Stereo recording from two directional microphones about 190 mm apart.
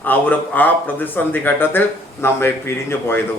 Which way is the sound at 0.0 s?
10° left (ahead or behind).